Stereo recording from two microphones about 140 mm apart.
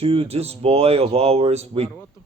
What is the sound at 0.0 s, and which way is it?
Speech, 45° right (ahead or behind).